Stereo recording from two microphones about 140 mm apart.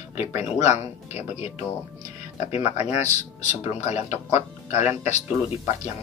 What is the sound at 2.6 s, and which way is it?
Speech, 50° left (ahead or behind).